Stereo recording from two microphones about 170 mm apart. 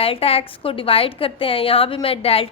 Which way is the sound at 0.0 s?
35° left (ahead or behind).